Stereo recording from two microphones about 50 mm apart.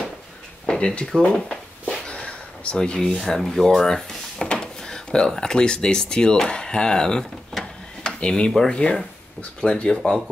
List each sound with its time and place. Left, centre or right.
0.7 s a sound: centre
1.5 s speech: centre
7.5 s mechanisms: centre
8.0 s speech: centre